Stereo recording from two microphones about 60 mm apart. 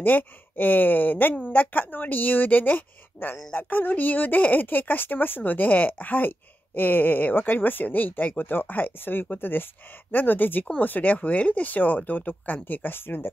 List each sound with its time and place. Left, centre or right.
0.0 s speech: left